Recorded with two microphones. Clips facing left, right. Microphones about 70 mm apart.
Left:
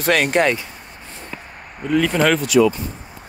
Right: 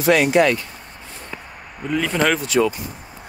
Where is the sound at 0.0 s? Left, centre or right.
Left.